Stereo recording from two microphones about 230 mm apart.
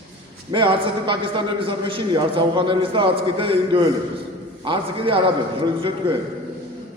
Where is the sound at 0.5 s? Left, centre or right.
Right.